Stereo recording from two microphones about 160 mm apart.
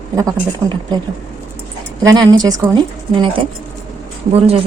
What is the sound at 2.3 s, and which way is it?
A woman's voice, 25° right (ahead or behind).